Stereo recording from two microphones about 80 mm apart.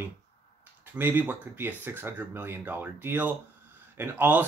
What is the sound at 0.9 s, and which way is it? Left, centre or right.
Speech, right.